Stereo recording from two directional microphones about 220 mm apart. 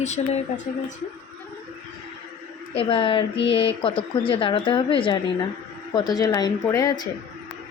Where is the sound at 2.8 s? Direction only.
25° left (ahead or behind).